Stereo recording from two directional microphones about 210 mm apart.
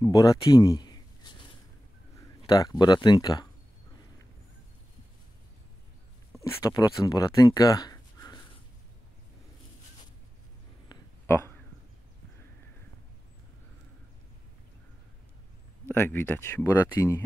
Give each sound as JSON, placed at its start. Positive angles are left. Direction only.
{"t": 0.0, "sound": "speech", "side_deg": 15}
{"t": 6.3, "sound": "speech", "side_deg": 15}
{"t": 10.9, "sound": "a sound", "side_deg": 10}
{"t": 15.8, "sound": "speech", "side_deg": 10}